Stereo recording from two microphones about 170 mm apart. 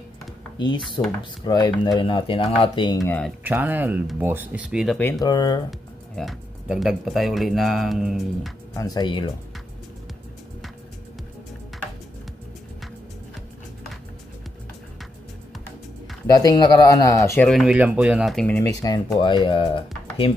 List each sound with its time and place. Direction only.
0.6 s speech: 25° left (ahead or behind)
3.1 s speech: 5° left (ahead or behind)
3.4 s speech: 10° right (ahead or behind)
4.9 s speech: 5° left (ahead or behind)
5.2 s speech: 25° left (ahead or behind)
5.7 s speech: centre (ahead or behind)
8.7 s speech: 20° left (ahead or behind)
16.3 s speech: 25° left (ahead or behind)
17.5 s speech: centre (ahead or behind)
18.8 s speech: 20° left (ahead or behind)